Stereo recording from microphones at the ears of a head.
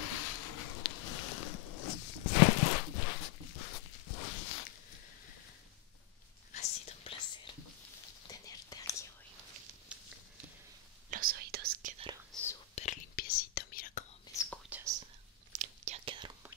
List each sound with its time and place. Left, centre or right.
0.0 s a sound: left
6.5 s whispering: left
11.1 s whispering: right
12.4 s whispering: left
15.5 s whispering: right